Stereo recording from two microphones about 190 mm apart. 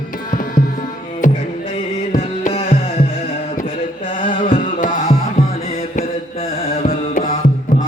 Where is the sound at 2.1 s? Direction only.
30° left (ahead or behind).